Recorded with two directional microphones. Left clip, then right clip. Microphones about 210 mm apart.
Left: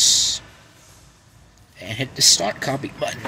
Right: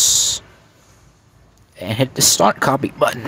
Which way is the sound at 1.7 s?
35° right (ahead or behind).